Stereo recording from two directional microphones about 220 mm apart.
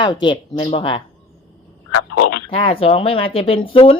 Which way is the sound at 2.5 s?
25° left (ahead or behind).